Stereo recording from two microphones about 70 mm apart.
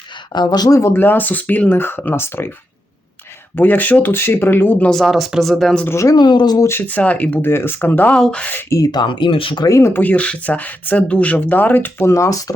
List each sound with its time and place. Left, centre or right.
0.3 s speech: left
0.8 s speech: left
3.5 s speech: left
4.9 s speech: centre
5.9 s speech: left
6.1 s speech: left
6.8 s speech: left
7.4 s speech: left
8.1 s speech: centre
9.0 s speech: left
9.6 s speech: left
9.9 s speech: left
12.0 s speech: left